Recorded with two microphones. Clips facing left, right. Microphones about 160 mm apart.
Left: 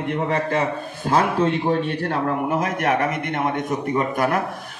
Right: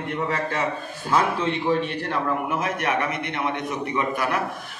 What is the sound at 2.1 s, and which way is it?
A man's voice, 40° left (ahead or behind).